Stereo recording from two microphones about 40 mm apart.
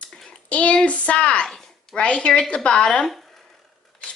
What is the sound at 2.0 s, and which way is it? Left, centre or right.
A woman's voice, left.